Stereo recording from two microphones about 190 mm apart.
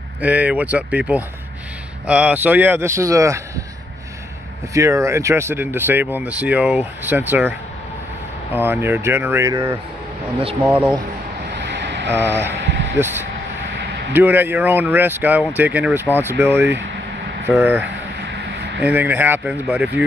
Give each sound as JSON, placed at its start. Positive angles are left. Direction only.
{"t": 0.2, "sound": "speech", "side_deg": -10}
{"t": 4.7, "sound": "speech", "side_deg": -15}
{"t": 8.5, "sound": "speech", "side_deg": -10}
{"t": 11.5, "sound": "vehicle", "side_deg": -60}
{"t": 12.3, "sound": "speech", "side_deg": -65}
{"t": 13.7, "sound": "vehicle", "side_deg": -55}
{"t": 14.1, "sound": "speech", "side_deg": -10}
{"t": 18.2, "sound": "a sound", "side_deg": -55}
{"t": 18.8, "sound": "speech", "side_deg": -10}